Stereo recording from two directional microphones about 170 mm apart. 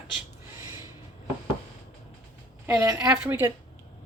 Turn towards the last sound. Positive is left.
turn(degrees=-15)  # may be behind; listen again after turning